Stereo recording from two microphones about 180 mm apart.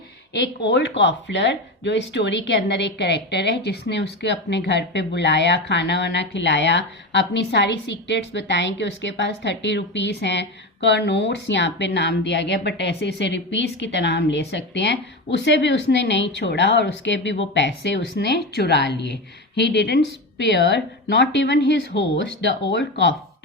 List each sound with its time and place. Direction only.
0.3 s speech: 75° left (ahead or behind)